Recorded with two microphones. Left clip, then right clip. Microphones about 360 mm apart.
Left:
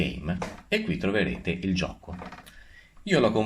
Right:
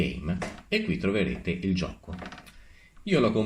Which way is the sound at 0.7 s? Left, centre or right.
Left.